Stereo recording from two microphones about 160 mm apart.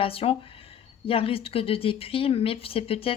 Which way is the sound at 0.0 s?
35° left (ahead or behind).